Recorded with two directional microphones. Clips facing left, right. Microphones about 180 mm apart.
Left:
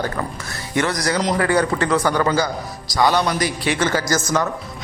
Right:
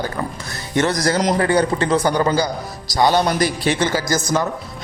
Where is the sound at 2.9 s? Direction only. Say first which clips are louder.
Right 2 dB; 30° right (ahead or behind).